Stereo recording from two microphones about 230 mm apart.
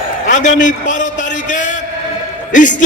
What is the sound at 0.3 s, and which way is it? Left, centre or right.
A man's voice, left.